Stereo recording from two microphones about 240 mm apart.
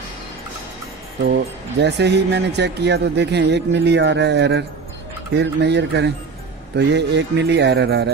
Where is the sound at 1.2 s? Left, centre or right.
Right.